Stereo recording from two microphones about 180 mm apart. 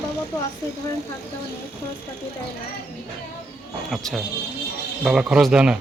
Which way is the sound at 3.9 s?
Centre (ahead or behind).